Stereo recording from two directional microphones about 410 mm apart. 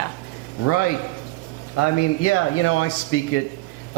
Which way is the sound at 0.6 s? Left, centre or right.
Left.